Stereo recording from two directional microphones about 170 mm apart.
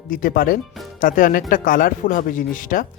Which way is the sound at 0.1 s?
60° left (ahead or behind).